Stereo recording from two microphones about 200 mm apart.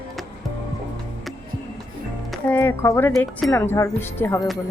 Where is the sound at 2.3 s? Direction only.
10° left (ahead or behind).